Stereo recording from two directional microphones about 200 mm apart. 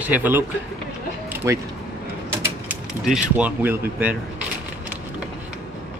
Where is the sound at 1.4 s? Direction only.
15° right (ahead or behind).